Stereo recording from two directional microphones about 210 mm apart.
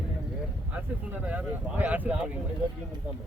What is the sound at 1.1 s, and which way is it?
Speech, 5° right (ahead or behind).